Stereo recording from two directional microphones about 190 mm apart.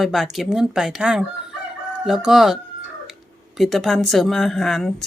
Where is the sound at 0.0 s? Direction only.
Centre (ahead or behind).